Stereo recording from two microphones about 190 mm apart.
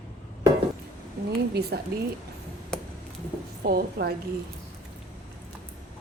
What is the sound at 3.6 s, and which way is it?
Speech, 55° right (ahead or behind).